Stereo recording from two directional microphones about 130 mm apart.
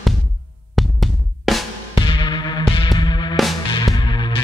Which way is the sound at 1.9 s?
40° left (ahead or behind).